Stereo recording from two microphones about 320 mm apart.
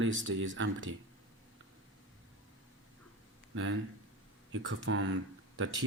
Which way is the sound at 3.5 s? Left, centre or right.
Right.